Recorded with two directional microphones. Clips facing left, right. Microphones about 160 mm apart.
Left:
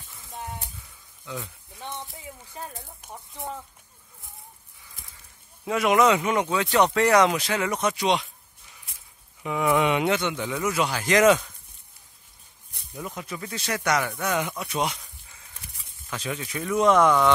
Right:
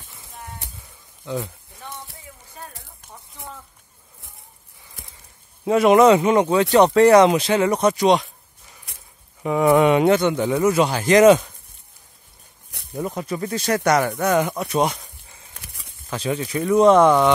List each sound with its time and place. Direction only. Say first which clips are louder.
2.1 s speech: left 2 dB; 20° left (ahead or behind)
5.7 s speech: right 7 dB; 30° right (ahead or behind)
9.4 s speech: right 7 dB; 40° right (ahead or behind)
12.9 s speech: right 9 dB; 40° right (ahead or behind)
15.5 s a sound: right 3 dB; 75° right (ahead or behind)
16.1 s speech: right 8 dB; 35° right (ahead or behind)